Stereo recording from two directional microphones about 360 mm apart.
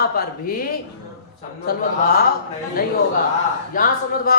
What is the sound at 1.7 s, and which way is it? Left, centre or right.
A woman's voice, left.